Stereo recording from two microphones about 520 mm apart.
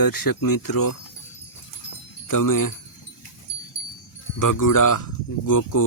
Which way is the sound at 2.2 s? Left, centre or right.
Left.